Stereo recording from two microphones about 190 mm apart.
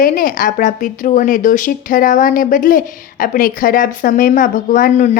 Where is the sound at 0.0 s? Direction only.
45° left (ahead or behind).